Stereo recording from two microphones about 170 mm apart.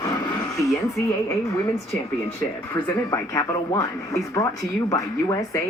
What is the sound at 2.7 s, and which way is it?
Speech, 20° left (ahead or behind).